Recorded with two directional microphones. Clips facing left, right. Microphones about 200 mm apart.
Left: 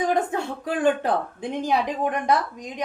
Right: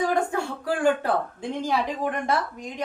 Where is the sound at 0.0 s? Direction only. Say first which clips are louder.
Left 1 dB; 20° left (ahead or behind).